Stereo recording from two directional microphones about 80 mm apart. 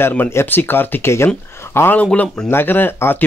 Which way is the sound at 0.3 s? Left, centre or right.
Left.